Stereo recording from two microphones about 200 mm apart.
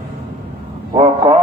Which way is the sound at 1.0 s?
20° right (ahead or behind).